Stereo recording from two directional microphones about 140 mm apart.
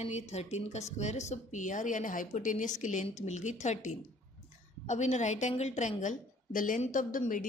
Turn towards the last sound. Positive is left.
turn(degrees=70)  # may be behind; listen again after turning